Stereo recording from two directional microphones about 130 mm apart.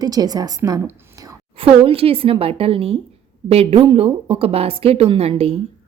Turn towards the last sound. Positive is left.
turn(degrees=-50)  # may be behind; listen again after turning